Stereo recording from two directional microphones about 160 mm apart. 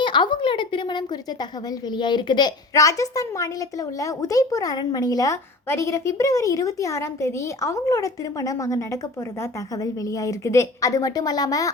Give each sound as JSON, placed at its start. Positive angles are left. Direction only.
{"t": 0.0, "sound": "a woman's voice", "side_deg": 30}